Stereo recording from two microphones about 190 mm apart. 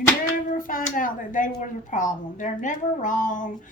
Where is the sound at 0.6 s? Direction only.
45° left (ahead or behind).